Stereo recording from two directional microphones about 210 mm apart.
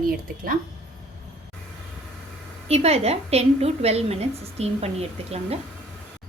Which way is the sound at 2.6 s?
30° right (ahead or behind).